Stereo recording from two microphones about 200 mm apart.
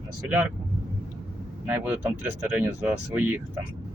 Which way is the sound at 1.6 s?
10° right (ahead or behind).